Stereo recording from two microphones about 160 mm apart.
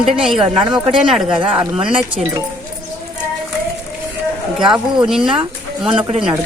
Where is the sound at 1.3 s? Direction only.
35° right (ahead or behind).